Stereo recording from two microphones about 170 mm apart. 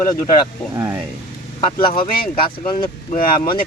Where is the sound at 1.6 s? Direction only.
25° left (ahead or behind).